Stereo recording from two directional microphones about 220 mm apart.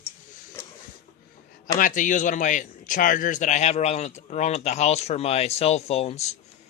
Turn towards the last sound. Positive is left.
turn(degrees=30)  # may be behind; listen again after turning